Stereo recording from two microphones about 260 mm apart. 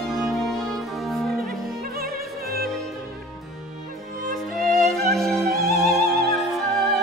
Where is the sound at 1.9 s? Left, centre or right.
Right.